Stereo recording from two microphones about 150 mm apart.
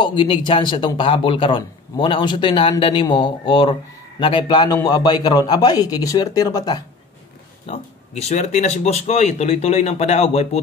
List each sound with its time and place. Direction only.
0.0 s a man's voice: 30° left (ahead or behind)
7.7 s speech: 45° left (ahead or behind)